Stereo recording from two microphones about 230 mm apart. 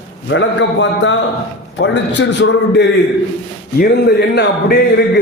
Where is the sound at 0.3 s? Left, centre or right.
Left.